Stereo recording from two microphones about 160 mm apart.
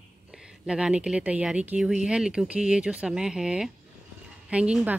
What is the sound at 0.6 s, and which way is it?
A woman's voice, 5° right (ahead or behind).